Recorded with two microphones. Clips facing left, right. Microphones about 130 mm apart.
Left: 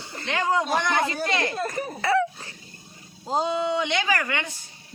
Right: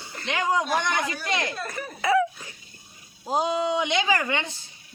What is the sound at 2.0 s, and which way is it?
Cough, 10° right (ahead or behind).